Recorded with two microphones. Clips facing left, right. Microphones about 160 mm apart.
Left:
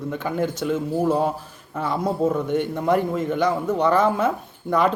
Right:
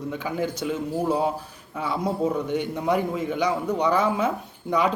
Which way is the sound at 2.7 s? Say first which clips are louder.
Left 2 dB; 10° right (ahead or behind).